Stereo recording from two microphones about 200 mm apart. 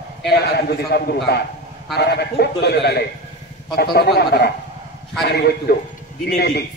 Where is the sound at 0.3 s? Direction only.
55° left (ahead or behind).